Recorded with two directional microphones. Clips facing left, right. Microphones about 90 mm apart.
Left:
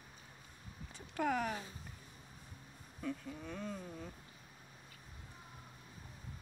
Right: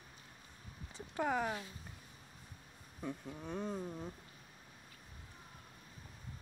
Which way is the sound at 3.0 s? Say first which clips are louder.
Left 1 dB; 25° right (ahead or behind).